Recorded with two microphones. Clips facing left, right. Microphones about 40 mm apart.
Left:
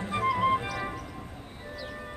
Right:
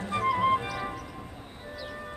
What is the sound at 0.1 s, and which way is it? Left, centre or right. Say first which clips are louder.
Music: right 1 dB; centre.